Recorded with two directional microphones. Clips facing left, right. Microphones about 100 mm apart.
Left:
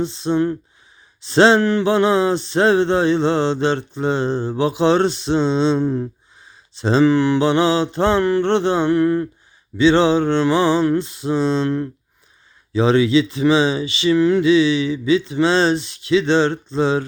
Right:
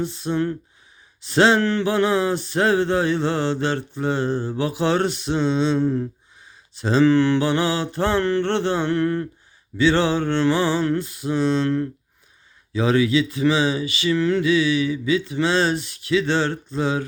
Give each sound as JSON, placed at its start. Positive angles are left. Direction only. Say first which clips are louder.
{"t": 0.0, "sound": "mantra", "louder": "left 4 dB", "side_deg": 25}
{"t": 7.1, "sound": "mantra", "louder": "left 2 dB", "side_deg": 15}